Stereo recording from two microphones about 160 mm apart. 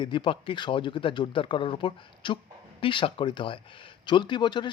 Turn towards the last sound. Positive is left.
turn(degrees=30)  # may be behind; listen again after turning